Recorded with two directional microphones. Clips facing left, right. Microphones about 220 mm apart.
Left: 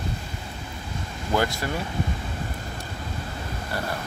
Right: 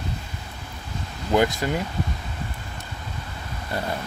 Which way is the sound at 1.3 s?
20° right (ahead or behind).